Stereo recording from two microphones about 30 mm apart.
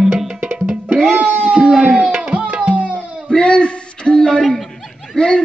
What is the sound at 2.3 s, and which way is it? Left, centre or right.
Music, right.